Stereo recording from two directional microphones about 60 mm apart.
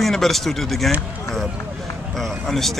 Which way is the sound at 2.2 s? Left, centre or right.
Centre.